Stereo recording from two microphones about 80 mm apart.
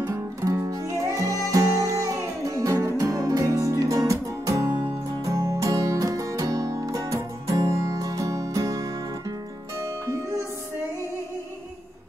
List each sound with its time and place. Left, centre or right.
0.0 s music: right